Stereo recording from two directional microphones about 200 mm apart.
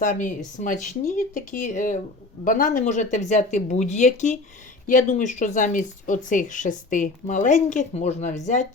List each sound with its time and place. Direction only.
0.0 s speech: 40° left (ahead or behind)